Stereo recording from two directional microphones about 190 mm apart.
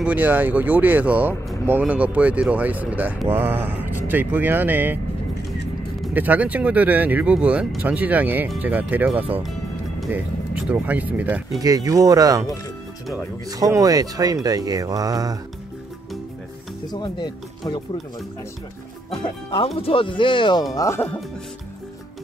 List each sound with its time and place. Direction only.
0.0 s speech: 10° right (ahead or behind)
11.6 s speech: 20° right (ahead or behind)
13.5 s speech: 20° right (ahead or behind)
16.9 s speech: 20° left (ahead or behind)
19.2 s speech: 25° left (ahead or behind)